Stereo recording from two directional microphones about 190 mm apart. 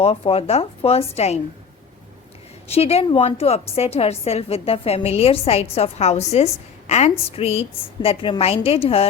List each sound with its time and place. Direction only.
0.0 s a woman's voice: 30° left (ahead or behind)
2.6 s a woman's voice: 30° left (ahead or behind)